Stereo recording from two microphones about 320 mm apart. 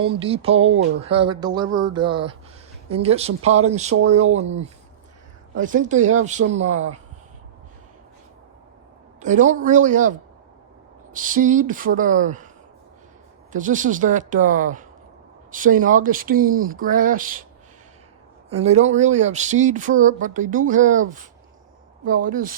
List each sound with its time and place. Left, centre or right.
0.0 s speech: centre
5.5 s speech: right
6.4 s speech: right
9.2 s speech: right
13.5 s speech: right
18.5 s speech: right